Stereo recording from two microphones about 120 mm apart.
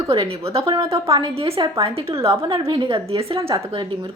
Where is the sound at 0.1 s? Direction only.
50° right (ahead or behind).